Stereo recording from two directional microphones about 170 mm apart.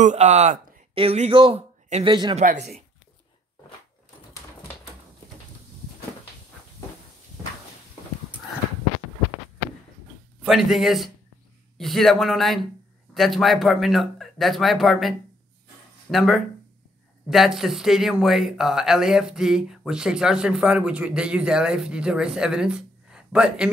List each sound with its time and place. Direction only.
0.0 s speech: 45° right (ahead or behind); by 2.3 s 25° right (ahead or behind)
2.3 s speech: 45° right (ahead or behind)
10.4 s speech: centre (ahead or behind)